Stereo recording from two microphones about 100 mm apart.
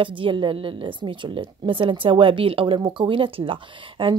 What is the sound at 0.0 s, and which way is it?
Speech, 60° right (ahead or behind).